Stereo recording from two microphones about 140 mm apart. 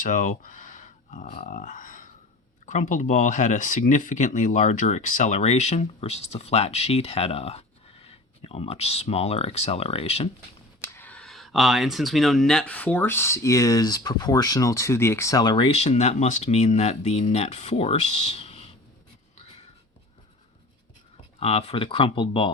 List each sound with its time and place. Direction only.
0.0 s speech: 60° left (ahead or behind); by 10.2 s 45° left (ahead or behind)
10.9 s speech: 10° left (ahead or behind); by 15.7 s 35° left (ahead or behind)
15.7 s speech: 50° left (ahead or behind)
21.3 s speech: 45° left (ahead or behind)